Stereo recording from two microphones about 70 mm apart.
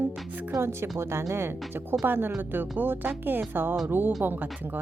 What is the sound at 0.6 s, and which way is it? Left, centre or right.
Speech, right.